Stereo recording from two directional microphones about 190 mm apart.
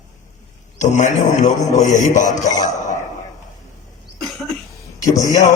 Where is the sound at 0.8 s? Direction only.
40° left (ahead or behind).